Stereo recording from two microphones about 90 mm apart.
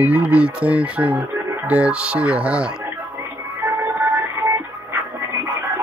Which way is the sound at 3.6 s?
25° right (ahead or behind).